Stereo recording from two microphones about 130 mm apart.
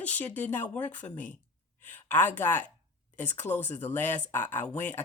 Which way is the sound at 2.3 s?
15° left (ahead or behind).